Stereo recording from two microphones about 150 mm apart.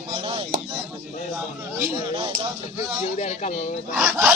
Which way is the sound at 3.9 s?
5° right (ahead or behind).